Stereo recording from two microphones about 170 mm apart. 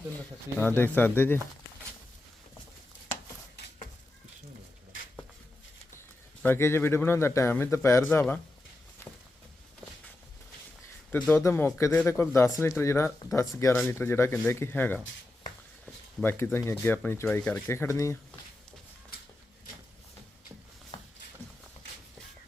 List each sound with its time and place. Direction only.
0.6 s a man's voice: 10° left (ahead or behind)
6.4 s a man's voice: 15° left (ahead or behind)
11.3 s a man's voice: 15° left (ahead or behind)
16.2 s a man's voice: 15° left (ahead or behind)